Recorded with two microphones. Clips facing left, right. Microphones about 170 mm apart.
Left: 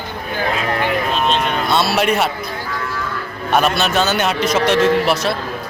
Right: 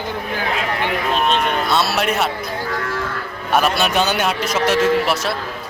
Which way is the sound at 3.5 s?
10° right (ahead or behind).